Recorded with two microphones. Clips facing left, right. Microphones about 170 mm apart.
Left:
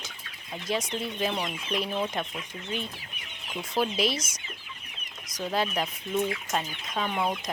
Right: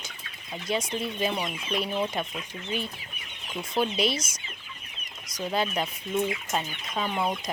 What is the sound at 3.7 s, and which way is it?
Speech, centre (ahead or behind).